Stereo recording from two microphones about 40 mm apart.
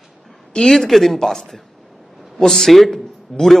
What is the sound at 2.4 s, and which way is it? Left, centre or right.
A man's voice, centre.